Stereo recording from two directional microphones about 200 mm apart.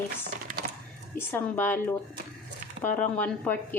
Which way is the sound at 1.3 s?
10° left (ahead or behind).